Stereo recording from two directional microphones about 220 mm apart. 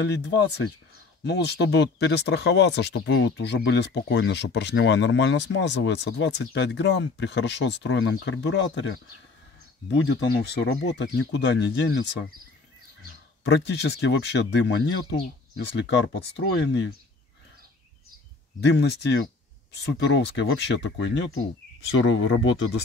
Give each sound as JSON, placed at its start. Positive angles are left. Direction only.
{"t": 0.0, "sound": "speech", "side_deg": 50}
{"t": 9.8, "sound": "speech", "side_deg": 55}
{"t": 13.4, "sound": "speech", "side_deg": 50}
{"t": 18.6, "sound": "speech", "side_deg": 50}